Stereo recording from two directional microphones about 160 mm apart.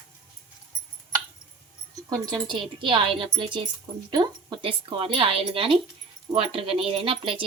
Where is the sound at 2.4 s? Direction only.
30° right (ahead or behind).